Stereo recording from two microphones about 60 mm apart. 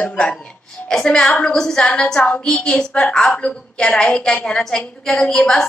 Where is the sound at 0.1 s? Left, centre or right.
Centre.